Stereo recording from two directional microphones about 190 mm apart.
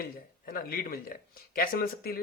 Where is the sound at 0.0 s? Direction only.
50° left (ahead or behind).